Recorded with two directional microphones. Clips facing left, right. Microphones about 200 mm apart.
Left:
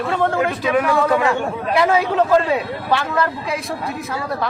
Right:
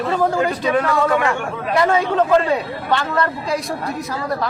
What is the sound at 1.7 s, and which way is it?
A man's voice, 5° left (ahead or behind).